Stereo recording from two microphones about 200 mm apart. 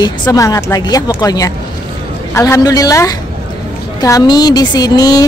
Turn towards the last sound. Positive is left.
turn(degrees=20)  # may be behind; listen again after turning